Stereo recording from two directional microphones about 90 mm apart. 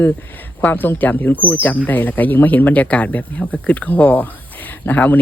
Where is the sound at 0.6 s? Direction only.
20° left (ahead or behind).